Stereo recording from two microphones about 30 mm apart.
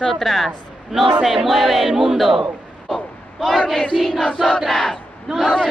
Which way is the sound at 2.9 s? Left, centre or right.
Centre.